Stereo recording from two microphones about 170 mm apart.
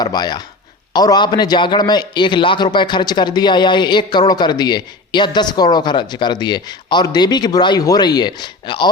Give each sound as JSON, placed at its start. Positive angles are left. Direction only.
{"t": 0.0, "sound": "a man's voice", "side_deg": 25}